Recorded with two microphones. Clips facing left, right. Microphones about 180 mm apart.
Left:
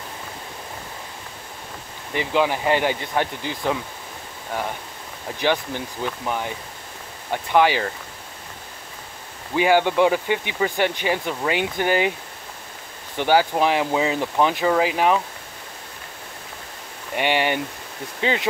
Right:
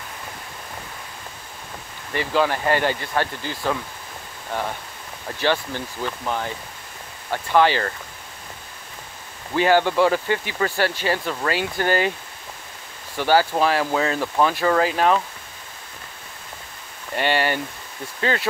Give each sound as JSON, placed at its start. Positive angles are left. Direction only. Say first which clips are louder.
{"t": 2.1, "sound": "speech", "louder": "even", "side_deg": 15}
{"t": 9.6, "sound": "speech", "louder": "even", "side_deg": 15}
{"t": 13.1, "sound": "speech", "louder": "even", "side_deg": 15}
{"t": 17.1, "sound": "speech", "louder": "even", "side_deg": 15}